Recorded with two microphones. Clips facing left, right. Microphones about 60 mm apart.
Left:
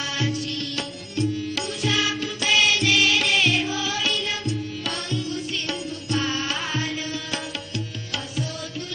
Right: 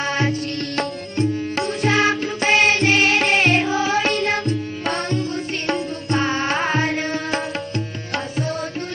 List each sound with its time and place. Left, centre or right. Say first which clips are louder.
0.8 s music: right 6 dB; right